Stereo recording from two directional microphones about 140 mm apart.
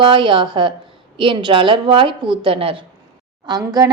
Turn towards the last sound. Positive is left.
turn(degrees=-30)  # may be behind; listen again after turning